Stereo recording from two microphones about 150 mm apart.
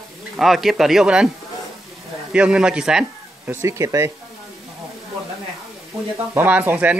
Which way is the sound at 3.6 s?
20° right (ahead or behind).